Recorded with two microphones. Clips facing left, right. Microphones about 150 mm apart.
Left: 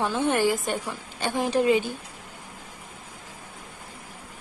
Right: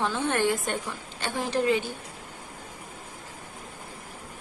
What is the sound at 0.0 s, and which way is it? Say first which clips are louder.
Speech: left 3 dB; 10° left (ahead or behind).